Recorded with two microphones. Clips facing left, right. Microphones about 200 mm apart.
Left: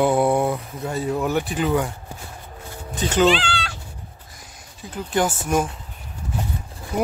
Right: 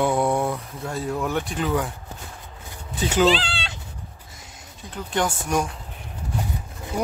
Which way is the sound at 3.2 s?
35° right (ahead or behind).